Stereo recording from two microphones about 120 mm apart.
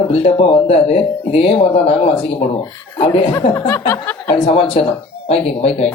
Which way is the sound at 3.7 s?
25° left (ahead or behind).